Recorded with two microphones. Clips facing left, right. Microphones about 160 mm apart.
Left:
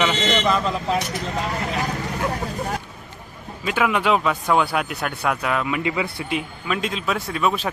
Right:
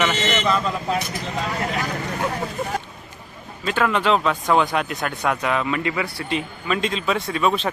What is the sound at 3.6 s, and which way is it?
Speech, 10° left (ahead or behind).